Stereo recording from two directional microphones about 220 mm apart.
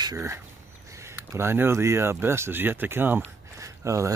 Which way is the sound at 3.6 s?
15° right (ahead or behind).